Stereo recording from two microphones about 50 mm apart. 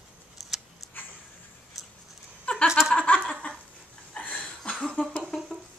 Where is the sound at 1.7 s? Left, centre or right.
Centre.